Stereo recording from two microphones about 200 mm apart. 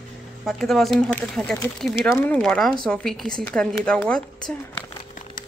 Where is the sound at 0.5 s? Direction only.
Centre (ahead or behind).